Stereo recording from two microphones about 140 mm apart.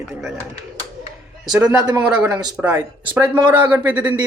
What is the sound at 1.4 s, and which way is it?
Speech, 10° right (ahead or behind).